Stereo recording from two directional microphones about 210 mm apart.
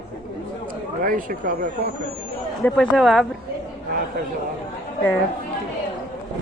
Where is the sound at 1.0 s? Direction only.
40° right (ahead or behind).